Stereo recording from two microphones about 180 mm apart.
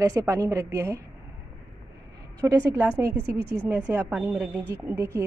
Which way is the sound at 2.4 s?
20° right (ahead or behind).